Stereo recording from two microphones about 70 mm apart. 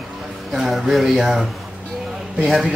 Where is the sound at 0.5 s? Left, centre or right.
Centre.